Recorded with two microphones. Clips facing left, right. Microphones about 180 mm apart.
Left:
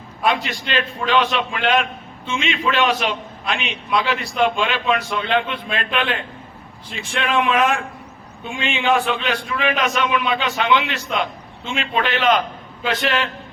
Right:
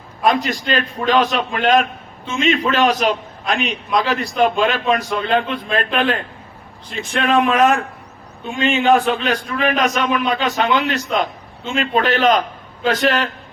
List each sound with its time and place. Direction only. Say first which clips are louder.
0.2 s a man's voice: right 4 dB; 40° right (ahead or behind)